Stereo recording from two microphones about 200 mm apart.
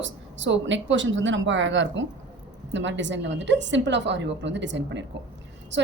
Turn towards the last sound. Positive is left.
turn(degrees=-65)  # may be behind; listen again after turning